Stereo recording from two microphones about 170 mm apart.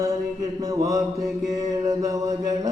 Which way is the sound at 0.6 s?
20° right (ahead or behind).